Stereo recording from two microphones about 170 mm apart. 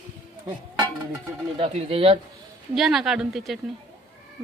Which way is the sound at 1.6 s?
35° right (ahead or behind).